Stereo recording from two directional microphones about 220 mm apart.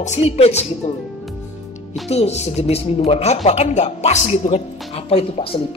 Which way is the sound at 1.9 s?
30° left (ahead or behind).